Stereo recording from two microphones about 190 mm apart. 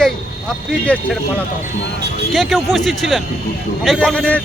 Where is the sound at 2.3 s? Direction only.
Centre (ahead or behind).